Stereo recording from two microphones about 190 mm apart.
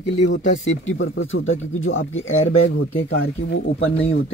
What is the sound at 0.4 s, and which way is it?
Speech, 40° left (ahead or behind).